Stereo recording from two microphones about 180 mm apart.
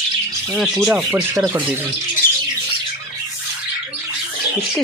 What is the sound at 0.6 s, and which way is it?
Speech, centre (ahead or behind).